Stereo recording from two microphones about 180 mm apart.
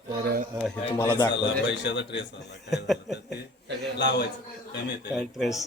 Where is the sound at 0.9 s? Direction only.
15° left (ahead or behind).